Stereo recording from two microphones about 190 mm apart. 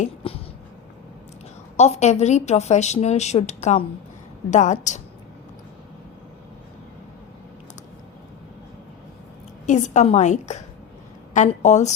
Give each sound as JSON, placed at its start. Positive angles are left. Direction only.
{"t": 0.2, "sound": "speech", "side_deg": 30}
{"t": 1.7, "sound": "speech", "side_deg": 35}
{"t": 9.6, "sound": "speech", "side_deg": 40}